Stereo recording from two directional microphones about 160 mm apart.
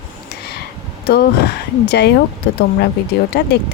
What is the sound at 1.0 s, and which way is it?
Speech, 90° left.